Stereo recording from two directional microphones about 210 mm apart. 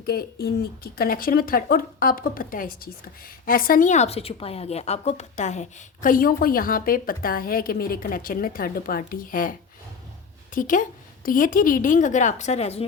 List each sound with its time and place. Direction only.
0.0 s a woman's voice: 45° left (ahead or behind); by 12.8 s 30° left (ahead or behind)